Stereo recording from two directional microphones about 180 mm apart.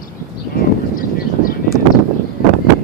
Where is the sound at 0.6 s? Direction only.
50° left (ahead or behind).